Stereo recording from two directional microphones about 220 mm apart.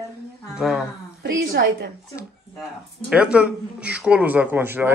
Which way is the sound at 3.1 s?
5° right (ahead or behind).